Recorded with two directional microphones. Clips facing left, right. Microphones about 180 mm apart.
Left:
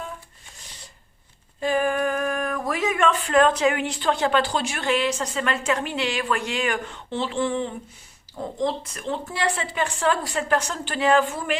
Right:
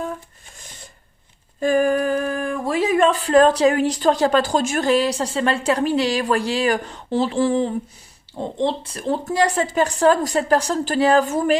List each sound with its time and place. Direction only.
1.6 s speech: 45° right (ahead or behind)